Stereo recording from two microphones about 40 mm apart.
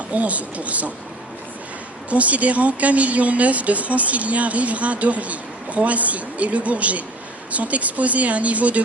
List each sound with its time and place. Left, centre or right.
0.1 s speech: right
2.0 s speech: right